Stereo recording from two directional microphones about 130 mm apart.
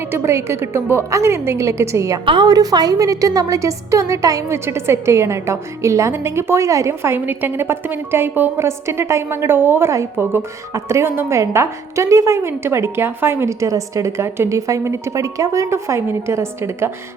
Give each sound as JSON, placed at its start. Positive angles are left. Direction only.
{"t": 0.1, "sound": "a woman's voice", "side_deg": -20}
{"t": 2.2, "sound": "a woman's voice", "side_deg": -35}